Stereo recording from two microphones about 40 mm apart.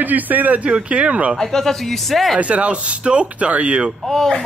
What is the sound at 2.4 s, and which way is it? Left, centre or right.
Speech, right.